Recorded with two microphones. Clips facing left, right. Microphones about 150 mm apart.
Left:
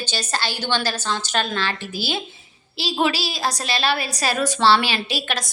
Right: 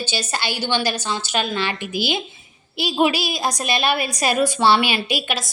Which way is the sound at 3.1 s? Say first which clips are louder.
Right 2 dB; 35° left (ahead or behind).